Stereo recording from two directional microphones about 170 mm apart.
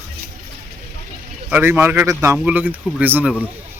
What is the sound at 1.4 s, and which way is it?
Speech, 10° right (ahead or behind).